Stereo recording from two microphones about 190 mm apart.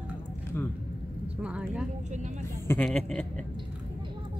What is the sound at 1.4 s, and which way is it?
A man's voice, 5° right (ahead or behind).